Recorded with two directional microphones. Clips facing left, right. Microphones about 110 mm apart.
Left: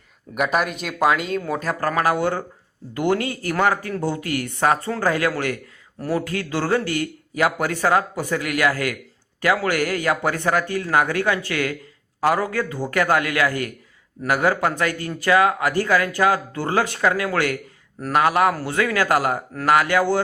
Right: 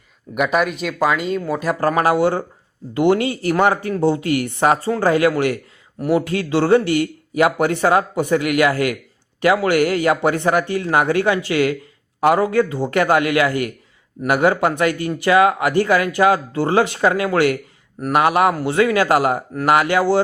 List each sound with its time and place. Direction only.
0.3 s speech: centre (ahead or behind)
1.6 s a man's voice: 20° right (ahead or behind)